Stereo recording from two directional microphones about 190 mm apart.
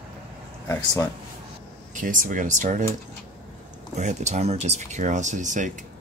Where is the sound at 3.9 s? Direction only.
40° right (ahead or behind).